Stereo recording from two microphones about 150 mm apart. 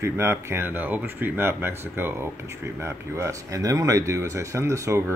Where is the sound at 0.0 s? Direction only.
15° right (ahead or behind).